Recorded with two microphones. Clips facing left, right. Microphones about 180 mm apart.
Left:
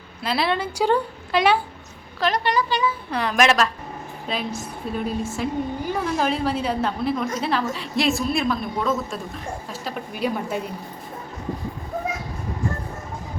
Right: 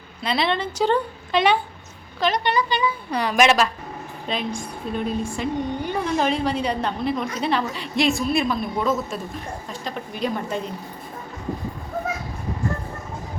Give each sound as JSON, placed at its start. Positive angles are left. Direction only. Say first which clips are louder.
{"t": 0.2, "sound": "a woman's voice", "louder": "even", "side_deg": 5}